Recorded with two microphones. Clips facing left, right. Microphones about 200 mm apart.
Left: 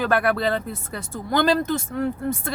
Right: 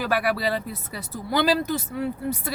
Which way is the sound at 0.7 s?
50° left (ahead or behind).